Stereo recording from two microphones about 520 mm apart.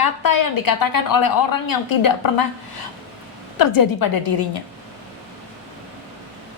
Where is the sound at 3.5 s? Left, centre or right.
Left.